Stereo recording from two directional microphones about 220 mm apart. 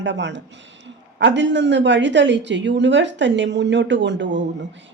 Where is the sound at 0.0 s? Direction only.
55° right (ahead or behind).